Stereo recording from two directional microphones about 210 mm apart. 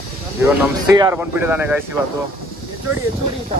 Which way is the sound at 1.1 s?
10° right (ahead or behind).